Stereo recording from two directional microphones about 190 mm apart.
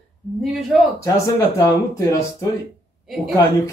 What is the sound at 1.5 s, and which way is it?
Speech, 15° left (ahead or behind).